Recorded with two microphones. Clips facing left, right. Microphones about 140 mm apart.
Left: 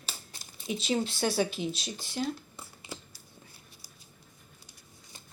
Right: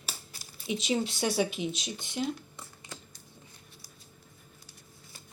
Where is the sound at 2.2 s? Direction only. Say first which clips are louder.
Even; 5° left (ahead or behind).